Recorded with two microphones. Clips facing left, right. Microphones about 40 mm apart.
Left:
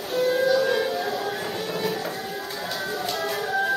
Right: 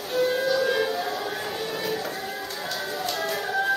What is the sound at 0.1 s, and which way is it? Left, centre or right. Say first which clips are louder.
Music: left 2 dB; centre.